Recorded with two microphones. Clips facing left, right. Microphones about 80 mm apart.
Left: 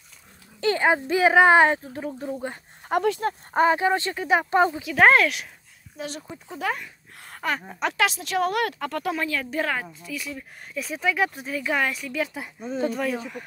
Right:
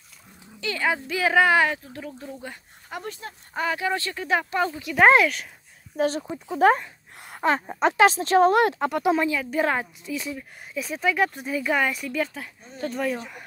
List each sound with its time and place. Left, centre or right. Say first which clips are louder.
0.6 s speech: left 5 dB; left
2.8 s a sound: left 12 dB; left
3.2 s speech: left 12 dB; left
3.5 s speech: left 5 dB; left
5.0 s speech: right 1 dB; centre
5.9 s speech: right 10 dB; right
6.2 s speech: right 7 dB; centre
6.6 s speech: right 10 dB; right
7.2 s gasp: right 5 dB; centre
7.5 s speech: right 4 dB; right
9.4 s speech: right 3 dB; centre
9.7 s speech: right 3 dB; right
10.3 s speech: right 1 dB; centre